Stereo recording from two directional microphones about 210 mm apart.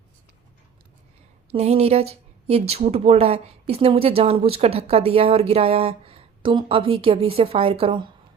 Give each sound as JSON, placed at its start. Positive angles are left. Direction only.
{"t": 1.5, "sound": "speech", "side_deg": -30}